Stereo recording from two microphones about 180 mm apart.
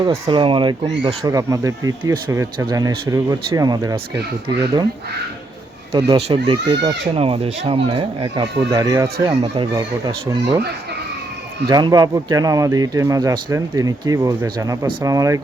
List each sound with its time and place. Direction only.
0.0 s speech: 30° right (ahead or behind)
5.9 s speech: 30° right (ahead or behind)
11.7 s speech: 20° right (ahead or behind)